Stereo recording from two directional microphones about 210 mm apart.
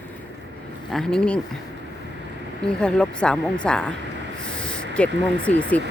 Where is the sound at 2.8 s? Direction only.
5° left (ahead or behind).